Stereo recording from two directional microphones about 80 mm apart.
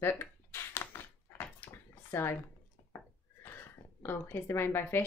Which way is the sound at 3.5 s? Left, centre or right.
Left.